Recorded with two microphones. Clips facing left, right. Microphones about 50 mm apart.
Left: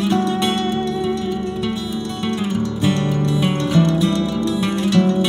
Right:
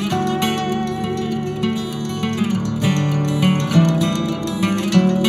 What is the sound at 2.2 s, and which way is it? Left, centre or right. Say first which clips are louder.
Music: even; right.